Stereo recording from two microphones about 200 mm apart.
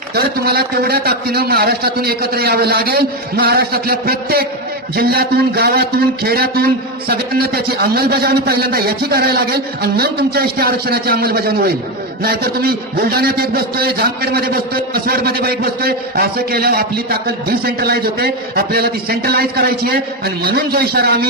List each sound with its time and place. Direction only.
0.1 s a man's voice: 50° right (ahead or behind)